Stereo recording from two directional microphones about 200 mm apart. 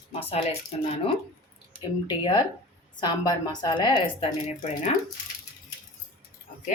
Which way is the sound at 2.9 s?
20° left (ahead or behind).